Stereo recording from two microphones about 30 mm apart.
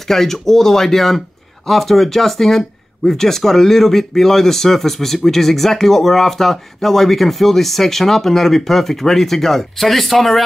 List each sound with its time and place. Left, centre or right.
0.1 s speech: centre